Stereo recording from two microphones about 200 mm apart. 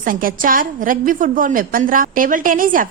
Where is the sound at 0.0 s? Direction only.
45° right (ahead or behind).